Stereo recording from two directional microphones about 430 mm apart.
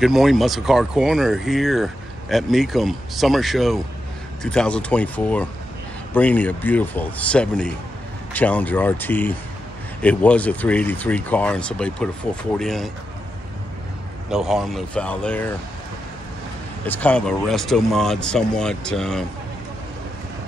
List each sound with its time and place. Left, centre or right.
0.0 s speech: centre
14.3 s speech: centre
16.8 s speech: centre